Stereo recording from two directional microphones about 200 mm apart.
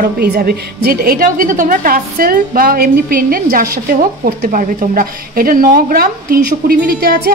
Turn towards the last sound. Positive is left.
turn(degrees=-50)  # may be behind; listen again after turning